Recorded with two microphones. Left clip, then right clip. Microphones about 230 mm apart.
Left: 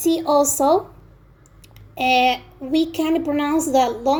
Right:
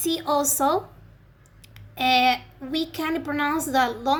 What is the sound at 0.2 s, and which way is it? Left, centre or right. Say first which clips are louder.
Speech: left 6 dB; right.